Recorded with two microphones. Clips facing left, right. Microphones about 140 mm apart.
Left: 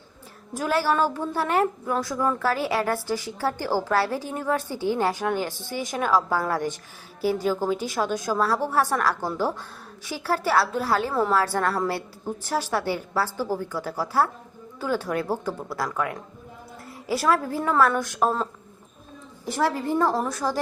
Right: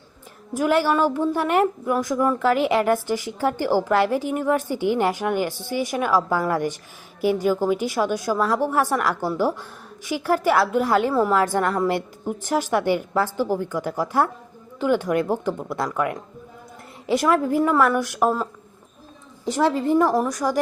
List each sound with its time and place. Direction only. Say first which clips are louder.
0.5 s a woman's voice: right 4 dB; 15° right (ahead or behind)
19.5 s a woman's voice: right 5 dB; 20° right (ahead or behind)